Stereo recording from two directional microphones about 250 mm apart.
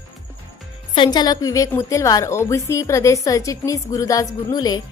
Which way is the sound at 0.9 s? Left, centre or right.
Centre.